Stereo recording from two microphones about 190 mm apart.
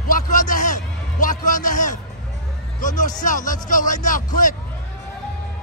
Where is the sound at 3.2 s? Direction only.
40° left (ahead or behind).